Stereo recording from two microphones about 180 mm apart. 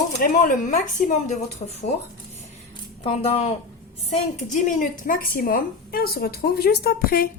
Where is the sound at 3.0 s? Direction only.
35° left (ahead or behind); by 7.3 s 55° left (ahead or behind).